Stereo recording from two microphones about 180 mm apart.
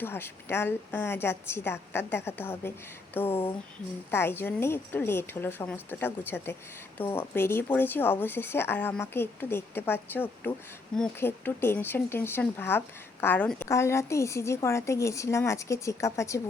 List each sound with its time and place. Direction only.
0.0 s speech: 10° left (ahead or behind)